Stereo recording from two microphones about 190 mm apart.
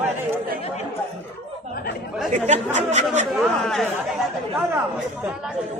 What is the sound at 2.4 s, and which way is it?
Speech, 40° right (ahead or behind).